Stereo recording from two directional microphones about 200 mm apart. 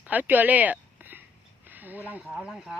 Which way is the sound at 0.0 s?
10° right (ahead or behind).